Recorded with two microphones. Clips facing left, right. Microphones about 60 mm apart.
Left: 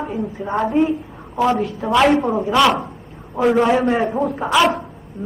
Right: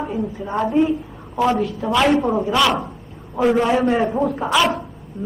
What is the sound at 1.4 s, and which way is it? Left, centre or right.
A woman's voice, centre.